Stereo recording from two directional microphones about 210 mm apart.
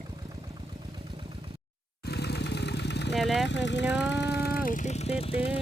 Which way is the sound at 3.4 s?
55° left (ahead or behind).